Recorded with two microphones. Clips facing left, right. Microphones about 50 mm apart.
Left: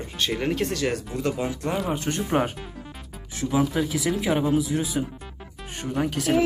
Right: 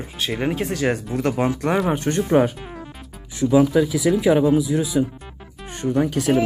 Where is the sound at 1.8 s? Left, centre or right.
Right.